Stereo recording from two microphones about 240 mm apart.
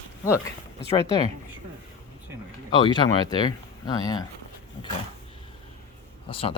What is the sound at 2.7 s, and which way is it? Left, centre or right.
Speech, centre.